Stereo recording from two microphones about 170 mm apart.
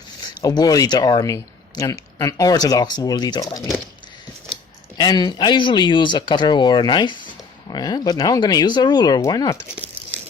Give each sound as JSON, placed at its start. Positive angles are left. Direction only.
{"t": 0.4, "sound": "speech", "side_deg": 20}
{"t": 4.9, "sound": "speech", "side_deg": 25}